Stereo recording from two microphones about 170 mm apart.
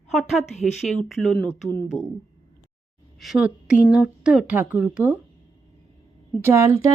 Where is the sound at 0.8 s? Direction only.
Centre (ahead or behind).